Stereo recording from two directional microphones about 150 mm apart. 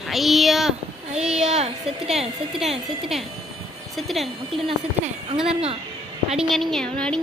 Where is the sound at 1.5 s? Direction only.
45° right (ahead or behind).